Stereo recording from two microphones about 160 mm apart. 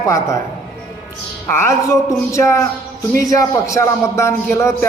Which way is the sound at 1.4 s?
15° left (ahead or behind).